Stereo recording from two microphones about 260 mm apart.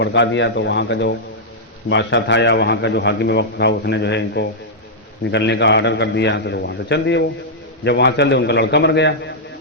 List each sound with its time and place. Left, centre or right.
0.0 s a man's voice: left